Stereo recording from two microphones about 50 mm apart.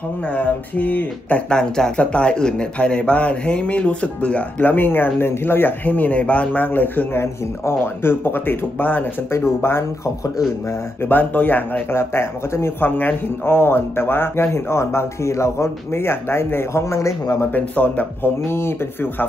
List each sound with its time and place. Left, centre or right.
0.3 s speech: left
1.5 s speech: centre; by 9.1 s left
9.3 s speech: left
11.0 s speech: left
11.9 s speech: left
12.8 s speech: left
13.5 s speech: left
16.8 s a man's voice: left
17.5 s speech: left
18.4 s speech: left